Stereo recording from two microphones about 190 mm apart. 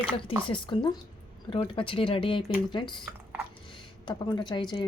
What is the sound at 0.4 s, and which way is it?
Speech, 25° left (ahead or behind).